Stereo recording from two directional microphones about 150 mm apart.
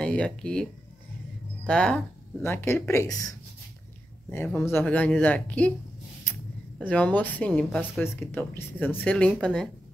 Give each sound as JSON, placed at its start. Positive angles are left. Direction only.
{"t": 0.0, "sound": "speech", "side_deg": 5}
{"t": 1.7, "sound": "speech", "side_deg": 10}
{"t": 4.6, "sound": "speech", "side_deg": 15}
{"t": 6.8, "sound": "speech", "side_deg": 10}